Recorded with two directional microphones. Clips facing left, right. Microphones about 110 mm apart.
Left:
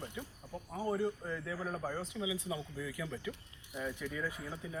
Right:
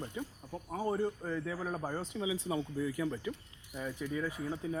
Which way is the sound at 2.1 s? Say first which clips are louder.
Right 3 dB; 40° right (ahead or behind).